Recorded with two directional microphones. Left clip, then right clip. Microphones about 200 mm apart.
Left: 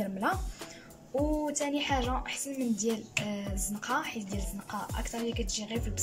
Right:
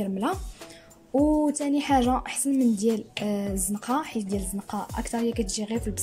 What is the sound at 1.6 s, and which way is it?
A woman's voice, 25° right (ahead or behind).